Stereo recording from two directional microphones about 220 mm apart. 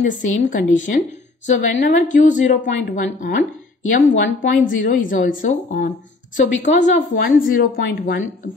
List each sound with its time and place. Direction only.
0.0 s a woman's voice: 35° left (ahead or behind)
4.4 s a woman's voice: 40° left (ahead or behind)